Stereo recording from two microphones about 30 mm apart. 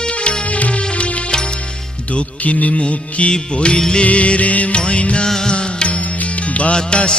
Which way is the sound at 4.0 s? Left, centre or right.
Left.